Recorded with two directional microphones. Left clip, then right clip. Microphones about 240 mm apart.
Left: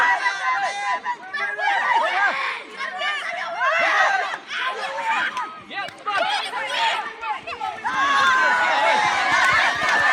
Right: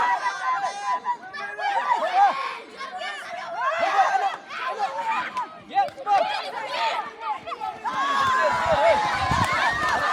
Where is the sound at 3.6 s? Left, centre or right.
Left.